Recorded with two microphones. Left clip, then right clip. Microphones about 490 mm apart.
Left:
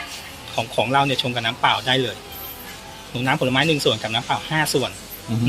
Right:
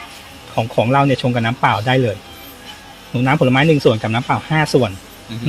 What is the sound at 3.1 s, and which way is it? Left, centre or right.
Speech, right.